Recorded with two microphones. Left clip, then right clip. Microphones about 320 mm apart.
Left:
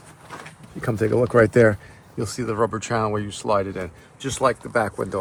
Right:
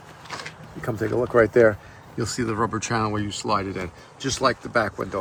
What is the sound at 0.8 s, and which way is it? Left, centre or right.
Speech, left.